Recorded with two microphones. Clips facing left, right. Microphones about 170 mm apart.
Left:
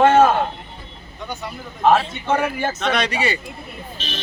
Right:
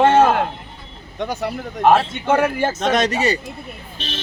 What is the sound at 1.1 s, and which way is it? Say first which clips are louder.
Speech: right 7 dB; 90° right.